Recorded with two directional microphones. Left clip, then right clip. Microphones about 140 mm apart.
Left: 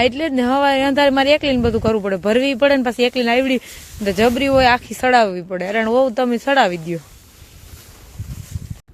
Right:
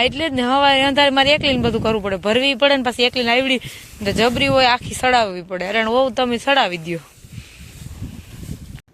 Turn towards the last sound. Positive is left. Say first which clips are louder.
# left 1 dB
turn(degrees=15)  # may be behind; listen again after turning